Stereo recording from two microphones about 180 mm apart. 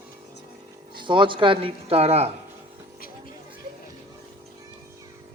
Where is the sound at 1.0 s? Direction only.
25° right (ahead or behind).